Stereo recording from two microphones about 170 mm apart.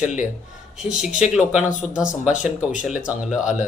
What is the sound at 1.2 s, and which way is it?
Speech, 5° right (ahead or behind).